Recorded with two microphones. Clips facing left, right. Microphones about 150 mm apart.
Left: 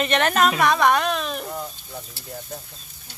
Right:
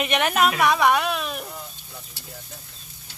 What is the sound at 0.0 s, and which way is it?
A woman's voice, 10° right (ahead or behind).